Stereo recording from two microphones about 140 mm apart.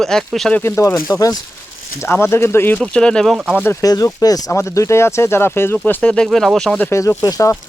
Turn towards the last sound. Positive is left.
turn(degrees=25)  # may be behind; listen again after turning